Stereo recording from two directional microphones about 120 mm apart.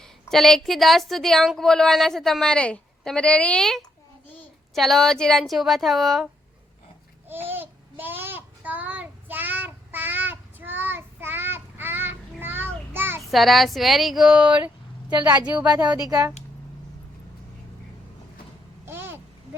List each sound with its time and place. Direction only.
0.0 s a woman's voice: 5° left (ahead or behind)
7.3 s babbling: 15° right (ahead or behind)
13.3 s a woman's voice: centre (ahead or behind)
15.1 s a woman's voice: 35° right (ahead or behind)
18.9 s babbling: 20° right (ahead or behind)